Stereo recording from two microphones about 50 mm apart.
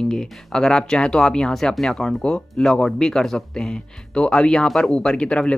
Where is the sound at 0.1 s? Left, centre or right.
Centre.